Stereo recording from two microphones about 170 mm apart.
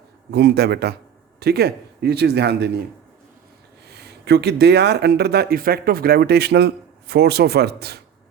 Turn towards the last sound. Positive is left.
turn(degrees=-70)  # may be behind; listen again after turning